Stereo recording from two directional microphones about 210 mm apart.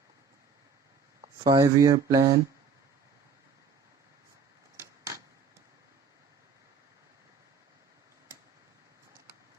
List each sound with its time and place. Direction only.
1.2 s speech: 20° right (ahead or behind)